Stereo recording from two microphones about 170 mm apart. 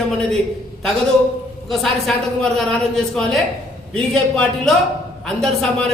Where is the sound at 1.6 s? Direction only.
Centre (ahead or behind).